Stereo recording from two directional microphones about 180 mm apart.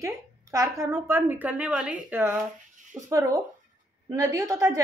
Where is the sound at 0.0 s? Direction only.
15° right (ahead or behind).